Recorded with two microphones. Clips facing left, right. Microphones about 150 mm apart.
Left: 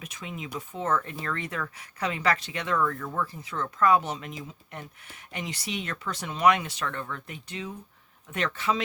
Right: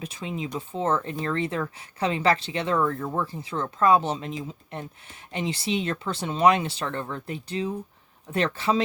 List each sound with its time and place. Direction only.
0.0 s speech: 30° right (ahead or behind)